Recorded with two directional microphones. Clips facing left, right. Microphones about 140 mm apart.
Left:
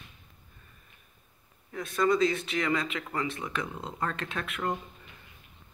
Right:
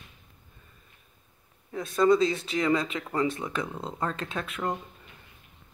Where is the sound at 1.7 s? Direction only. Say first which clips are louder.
Right 4 dB; 25° right (ahead or behind).